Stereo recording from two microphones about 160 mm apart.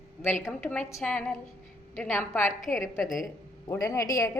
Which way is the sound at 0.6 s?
15° left (ahead or behind).